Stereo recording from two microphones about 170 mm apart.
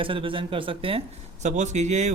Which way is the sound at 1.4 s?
45° right (ahead or behind).